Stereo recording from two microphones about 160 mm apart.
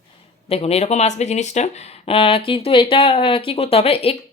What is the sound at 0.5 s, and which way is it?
A woman's voice, 40° left (ahead or behind).